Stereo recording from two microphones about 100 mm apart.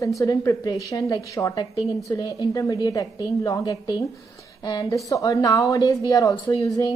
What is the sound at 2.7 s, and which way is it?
A woman's voice, 40° left (ahead or behind).